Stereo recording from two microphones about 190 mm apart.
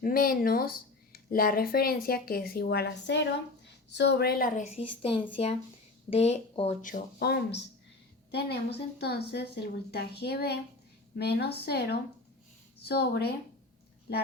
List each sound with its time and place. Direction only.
0.0 s speech: 50° left (ahead or behind); by 6.9 s 35° left (ahead or behind)
6.9 s a woman's voice: 60° left (ahead or behind)